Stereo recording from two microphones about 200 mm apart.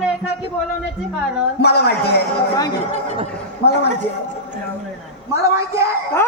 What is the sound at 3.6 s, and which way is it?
Speech, 55° left (ahead or behind).